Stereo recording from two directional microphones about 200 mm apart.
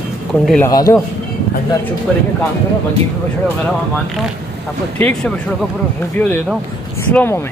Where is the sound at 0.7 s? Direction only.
20° left (ahead or behind).